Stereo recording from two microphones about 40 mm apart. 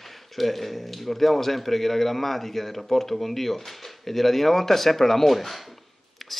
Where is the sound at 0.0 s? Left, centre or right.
Centre.